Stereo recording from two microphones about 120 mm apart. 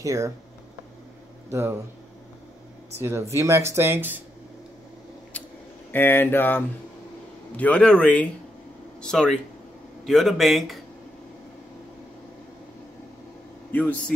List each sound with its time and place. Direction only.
0.0 s speech: 25° right (ahead or behind)
1.5 s speech: 20° right (ahead or behind)
3.0 s speech: 20° right (ahead or behind)
5.9 s speech: 15° left (ahead or behind); by 10.8 s centre (ahead or behind)
13.7 s speech: 15° left (ahead or behind)